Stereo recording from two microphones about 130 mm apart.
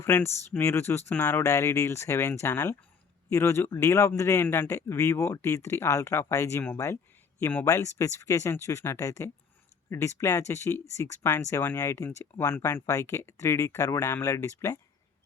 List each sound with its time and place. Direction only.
0.0 s speech: 20° left (ahead or behind)